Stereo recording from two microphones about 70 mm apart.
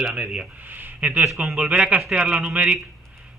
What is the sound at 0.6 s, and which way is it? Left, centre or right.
A man's voice, right.